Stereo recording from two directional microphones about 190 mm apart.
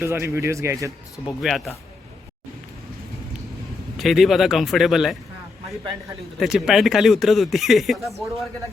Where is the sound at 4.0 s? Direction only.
Centre (ahead or behind).